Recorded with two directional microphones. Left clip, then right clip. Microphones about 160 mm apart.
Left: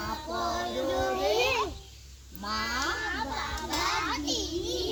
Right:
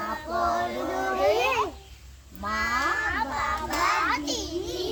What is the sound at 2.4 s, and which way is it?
Cat, 20° right (ahead or behind).